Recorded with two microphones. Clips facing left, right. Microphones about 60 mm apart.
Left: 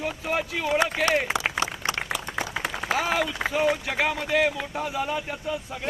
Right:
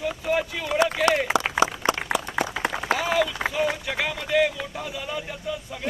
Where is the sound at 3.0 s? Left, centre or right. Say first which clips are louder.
Right 1 dB; left.